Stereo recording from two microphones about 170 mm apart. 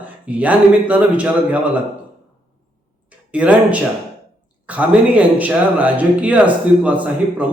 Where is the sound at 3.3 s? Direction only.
5° right (ahead or behind).